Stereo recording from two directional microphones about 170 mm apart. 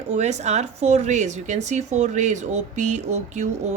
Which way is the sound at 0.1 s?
40° right (ahead or behind).